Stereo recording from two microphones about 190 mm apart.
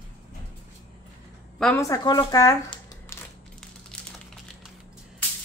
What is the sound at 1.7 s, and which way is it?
Speech, 15° left (ahead or behind).